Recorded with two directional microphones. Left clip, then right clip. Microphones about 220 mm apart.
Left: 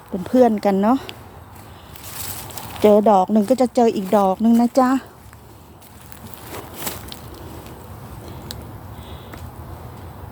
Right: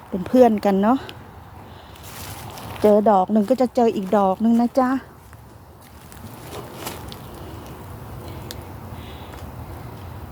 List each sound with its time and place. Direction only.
0.3 s speech: 5° right (ahead or behind)
2.6 s speech: 15° left (ahead or behind)
6.7 s a sound: 20° left (ahead or behind)